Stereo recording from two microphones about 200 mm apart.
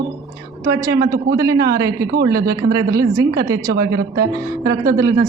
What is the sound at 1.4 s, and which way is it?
Speech, 15° right (ahead or behind).